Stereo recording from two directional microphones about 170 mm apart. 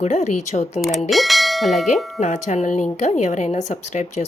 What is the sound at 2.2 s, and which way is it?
Speech, 45° left (ahead or behind).